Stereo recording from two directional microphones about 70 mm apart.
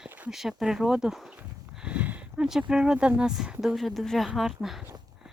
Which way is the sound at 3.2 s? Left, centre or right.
Centre.